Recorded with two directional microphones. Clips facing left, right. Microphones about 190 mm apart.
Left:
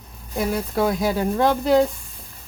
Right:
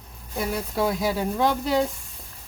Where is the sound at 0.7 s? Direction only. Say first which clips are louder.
Left 2 dB; 50° left (ahead or behind).